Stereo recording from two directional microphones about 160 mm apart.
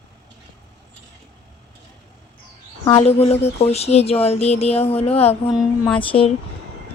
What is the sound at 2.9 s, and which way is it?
Speech, 40° left (ahead or behind).